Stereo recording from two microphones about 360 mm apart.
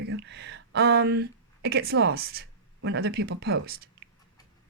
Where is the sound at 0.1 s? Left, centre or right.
Right.